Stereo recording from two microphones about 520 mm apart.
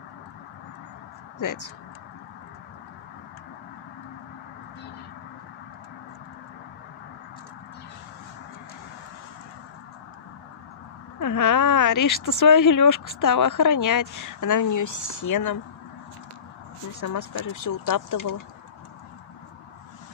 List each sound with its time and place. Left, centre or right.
1.4 s speech: left
11.1 s speech: left
17.0 s speech: left